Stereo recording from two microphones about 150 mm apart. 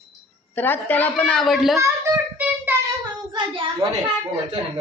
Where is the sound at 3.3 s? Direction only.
35° right (ahead or behind).